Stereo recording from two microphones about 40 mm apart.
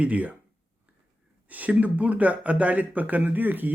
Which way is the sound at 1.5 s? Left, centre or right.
Right.